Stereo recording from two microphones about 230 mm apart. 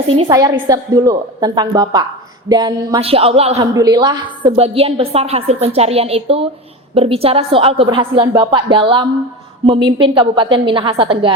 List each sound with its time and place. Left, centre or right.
0.2 s a woman's voice: centre